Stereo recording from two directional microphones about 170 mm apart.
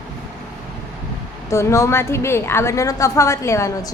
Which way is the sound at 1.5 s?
15° left (ahead or behind).